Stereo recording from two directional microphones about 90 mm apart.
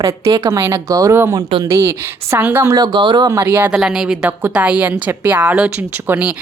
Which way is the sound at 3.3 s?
30° right (ahead or behind).